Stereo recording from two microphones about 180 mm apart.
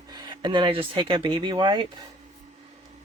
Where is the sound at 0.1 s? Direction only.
25° right (ahead or behind).